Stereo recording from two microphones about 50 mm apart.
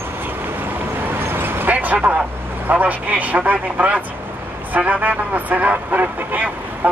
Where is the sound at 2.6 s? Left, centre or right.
Right.